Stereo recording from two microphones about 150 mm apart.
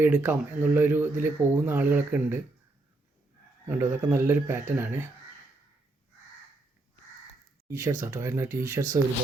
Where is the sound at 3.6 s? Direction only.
15° right (ahead or behind).